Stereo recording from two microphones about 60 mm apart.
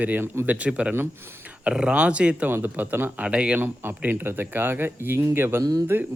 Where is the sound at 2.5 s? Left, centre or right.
Right.